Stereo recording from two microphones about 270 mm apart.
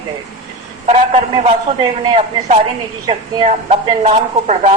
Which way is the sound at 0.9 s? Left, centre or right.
Right.